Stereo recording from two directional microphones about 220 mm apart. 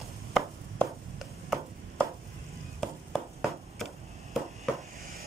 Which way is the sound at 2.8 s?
Centre (ahead or behind).